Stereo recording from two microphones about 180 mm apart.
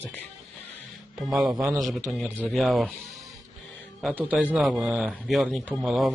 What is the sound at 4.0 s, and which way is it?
Speech, 5° right (ahead or behind).